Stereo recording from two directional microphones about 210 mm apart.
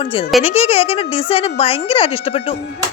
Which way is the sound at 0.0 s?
25° left (ahead or behind).